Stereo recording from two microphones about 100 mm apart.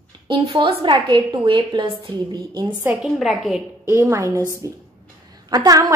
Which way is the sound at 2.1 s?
45° right (ahead or behind).